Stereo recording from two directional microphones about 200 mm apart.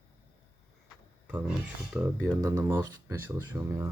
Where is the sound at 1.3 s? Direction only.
10° right (ahead or behind).